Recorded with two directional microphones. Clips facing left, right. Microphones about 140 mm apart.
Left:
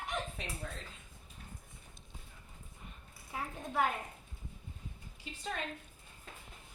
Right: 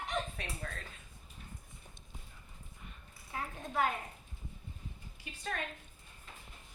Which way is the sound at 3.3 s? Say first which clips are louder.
Even; 10° left (ahead or behind).